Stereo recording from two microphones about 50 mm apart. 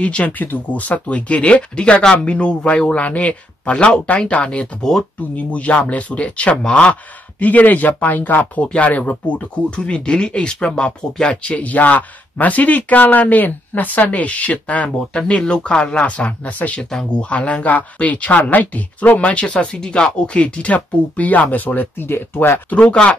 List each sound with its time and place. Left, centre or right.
0.0 s speech: left
8.6 s speech: left
20.3 s speech: left
22.0 s speech: left
22.7 s speech: left